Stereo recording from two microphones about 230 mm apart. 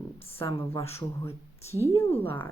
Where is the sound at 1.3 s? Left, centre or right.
Centre.